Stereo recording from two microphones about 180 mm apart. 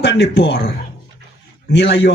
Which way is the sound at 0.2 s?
65° left (ahead or behind).